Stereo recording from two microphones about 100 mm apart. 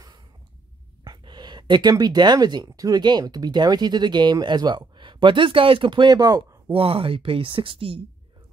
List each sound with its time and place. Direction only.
1.0 s speech: 45° right (ahead or behind)
6.7 s speech: 70° right (ahead or behind)